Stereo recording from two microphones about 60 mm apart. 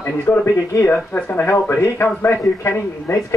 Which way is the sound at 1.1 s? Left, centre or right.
Left.